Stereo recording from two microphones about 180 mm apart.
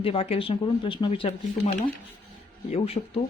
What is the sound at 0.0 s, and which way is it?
Speech, 30° left (ahead or behind).